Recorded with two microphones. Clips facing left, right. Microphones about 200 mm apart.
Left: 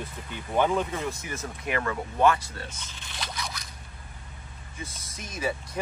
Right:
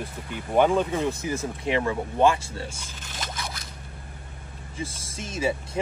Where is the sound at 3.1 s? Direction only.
45° right (ahead or behind).